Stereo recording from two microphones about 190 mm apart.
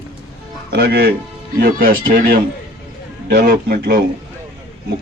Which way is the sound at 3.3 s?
55° right (ahead or behind).